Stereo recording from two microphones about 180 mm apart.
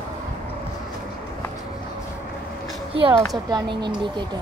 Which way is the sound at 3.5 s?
25° right (ahead or behind).